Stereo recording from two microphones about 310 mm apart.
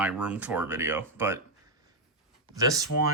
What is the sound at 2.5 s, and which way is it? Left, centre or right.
Speech, centre.